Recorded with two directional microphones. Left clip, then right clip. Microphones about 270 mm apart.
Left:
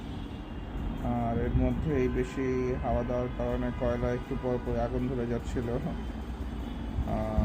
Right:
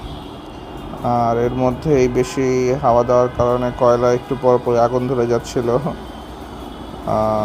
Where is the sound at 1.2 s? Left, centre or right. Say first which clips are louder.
Right 15 dB; right.